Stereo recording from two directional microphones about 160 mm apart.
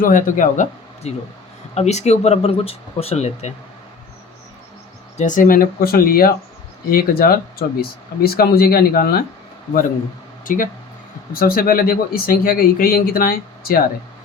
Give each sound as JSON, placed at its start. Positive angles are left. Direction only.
{"t": 0.0, "sound": "speech", "side_deg": 60}
{"t": 5.1, "sound": "speech", "side_deg": 50}
{"t": 10.4, "sound": "speech", "side_deg": 55}
{"t": 11.3, "sound": "speech", "side_deg": 65}